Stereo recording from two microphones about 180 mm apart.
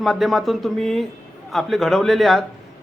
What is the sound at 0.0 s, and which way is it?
Speech, centre (ahead or behind).